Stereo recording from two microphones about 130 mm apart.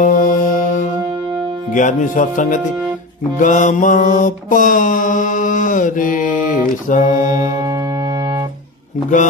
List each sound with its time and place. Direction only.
0.0 s music: 90° left
1.7 s speech: 80° left
3.3 s mantra: 80° left
6.7 s music: 75° left (ahead or behind)